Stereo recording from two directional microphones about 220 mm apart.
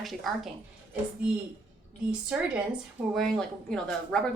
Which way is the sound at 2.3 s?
5° right (ahead or behind).